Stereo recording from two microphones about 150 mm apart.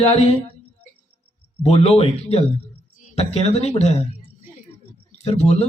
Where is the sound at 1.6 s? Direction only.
45° left (ahead or behind).